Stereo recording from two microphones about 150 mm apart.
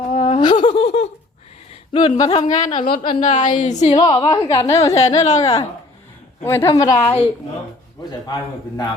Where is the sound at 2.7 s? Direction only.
75° left (ahead or behind).